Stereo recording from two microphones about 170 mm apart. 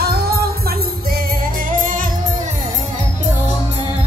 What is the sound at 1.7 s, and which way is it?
Music, 50° right (ahead or behind).